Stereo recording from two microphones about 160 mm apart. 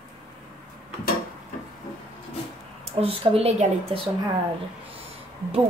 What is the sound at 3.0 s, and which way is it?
Speech, 40° right (ahead or behind).